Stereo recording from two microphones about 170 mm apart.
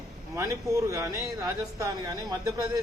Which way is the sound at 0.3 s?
20° right (ahead or behind).